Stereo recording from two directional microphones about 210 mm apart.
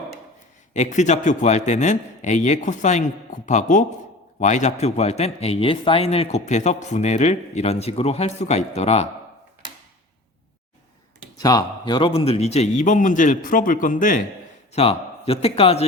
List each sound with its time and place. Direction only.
0.7 s a man's voice: 35° left (ahead or behind)
11.4 s a man's voice: 20° left (ahead or behind); by 14.2 s 40° left (ahead or behind)
14.7 s a man's voice: 30° left (ahead or behind)